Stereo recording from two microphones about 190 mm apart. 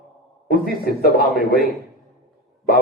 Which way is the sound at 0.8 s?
55° left (ahead or behind).